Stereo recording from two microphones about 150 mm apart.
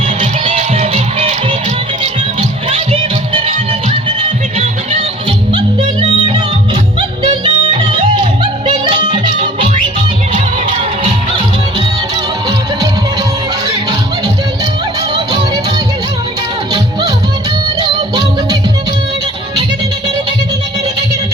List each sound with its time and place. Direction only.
0.2 s music: 45° right (ahead or behind)
5.5 s music: 35° right (ahead or behind)
17.7 s music: 30° right (ahead or behind)